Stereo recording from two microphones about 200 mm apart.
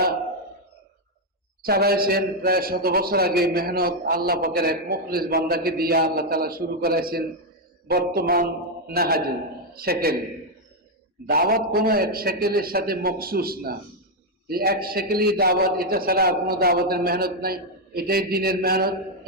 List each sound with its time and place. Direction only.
1.6 s a man's voice: 50° right (ahead or behind)
11.3 s a man's voice: 50° right (ahead or behind)